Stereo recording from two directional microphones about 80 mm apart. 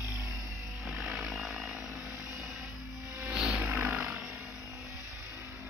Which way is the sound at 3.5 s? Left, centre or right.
Centre.